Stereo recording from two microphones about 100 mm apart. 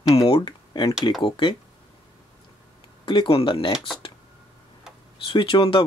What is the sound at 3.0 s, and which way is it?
Speech, 55° left (ahead or behind).